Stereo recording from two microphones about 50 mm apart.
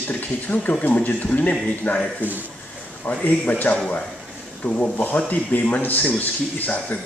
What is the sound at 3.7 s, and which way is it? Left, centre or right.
A man's voice, left.